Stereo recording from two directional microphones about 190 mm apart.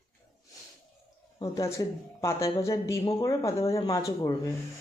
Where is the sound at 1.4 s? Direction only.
15° left (ahead or behind).